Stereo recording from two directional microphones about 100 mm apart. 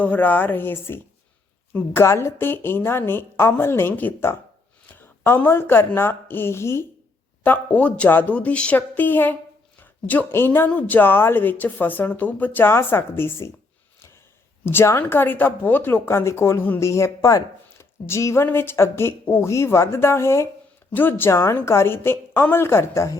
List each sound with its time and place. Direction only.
0.0 s a woman's voice: 15° left (ahead or behind)
7.4 s speech: 15° left (ahead or behind)
14.6 s speech: 20° left (ahead or behind)